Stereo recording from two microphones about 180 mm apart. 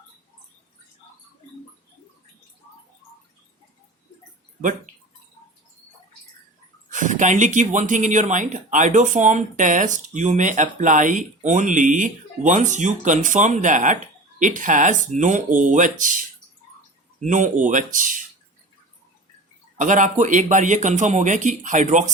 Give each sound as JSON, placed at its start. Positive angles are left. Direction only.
{"t": 6.9, "sound": "speech", "side_deg": -45}
{"t": 17.2, "sound": "speech", "side_deg": -45}
{"t": 19.7, "sound": "speech", "side_deg": -45}